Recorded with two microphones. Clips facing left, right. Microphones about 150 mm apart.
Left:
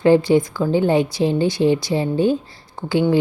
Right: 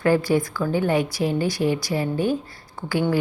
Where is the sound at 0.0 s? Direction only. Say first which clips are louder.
Left 6 dB; 25° left (ahead or behind).